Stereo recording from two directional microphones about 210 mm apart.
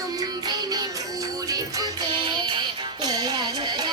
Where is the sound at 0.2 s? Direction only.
15° right (ahead or behind).